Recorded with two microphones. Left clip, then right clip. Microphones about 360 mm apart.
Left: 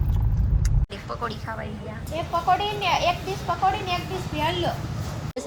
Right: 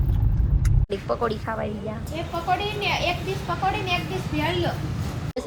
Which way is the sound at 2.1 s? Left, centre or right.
Left.